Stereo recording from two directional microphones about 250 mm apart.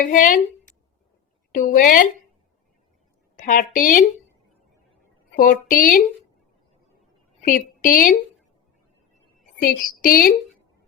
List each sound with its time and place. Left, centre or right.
0.0 s a woman's voice: left
1.5 s a woman's voice: left
3.3 s a woman's voice: left
5.4 s a woman's voice: left
7.4 s a woman's voice: left
9.6 s a woman's voice: left